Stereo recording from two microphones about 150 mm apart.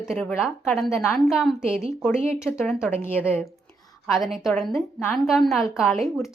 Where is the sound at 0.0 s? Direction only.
Centre (ahead or behind).